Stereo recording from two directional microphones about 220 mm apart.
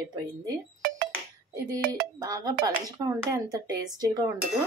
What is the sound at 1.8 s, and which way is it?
Speech, 45° right (ahead or behind).